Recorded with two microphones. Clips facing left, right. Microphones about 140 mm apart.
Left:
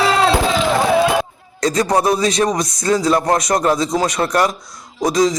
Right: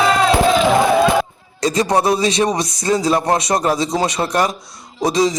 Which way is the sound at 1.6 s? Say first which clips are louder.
Even; 25° right (ahead or behind).